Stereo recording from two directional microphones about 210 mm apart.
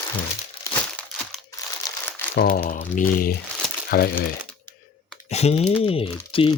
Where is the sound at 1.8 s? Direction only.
15° left (ahead or behind).